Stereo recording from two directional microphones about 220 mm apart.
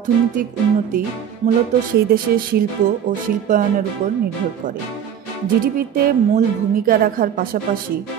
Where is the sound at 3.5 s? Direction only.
40° right (ahead or behind).